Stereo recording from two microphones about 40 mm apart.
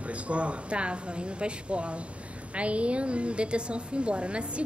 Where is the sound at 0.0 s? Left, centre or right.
Right.